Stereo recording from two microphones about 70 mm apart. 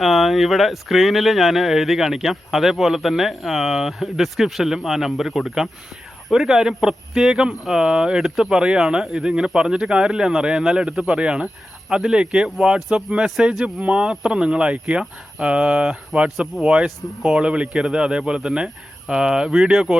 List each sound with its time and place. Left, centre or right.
0.0 s speech: centre